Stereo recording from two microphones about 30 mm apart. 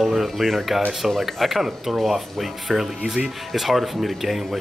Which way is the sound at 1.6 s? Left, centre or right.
Centre.